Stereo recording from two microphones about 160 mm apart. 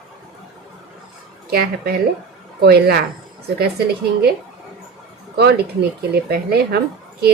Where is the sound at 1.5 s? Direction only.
75° right (ahead or behind).